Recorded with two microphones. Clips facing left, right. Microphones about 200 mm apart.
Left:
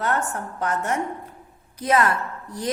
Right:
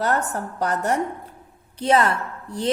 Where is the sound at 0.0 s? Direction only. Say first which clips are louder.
Right 2 dB; 35° right (ahead or behind).